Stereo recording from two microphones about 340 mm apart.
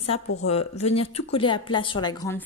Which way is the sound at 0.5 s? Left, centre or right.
Centre.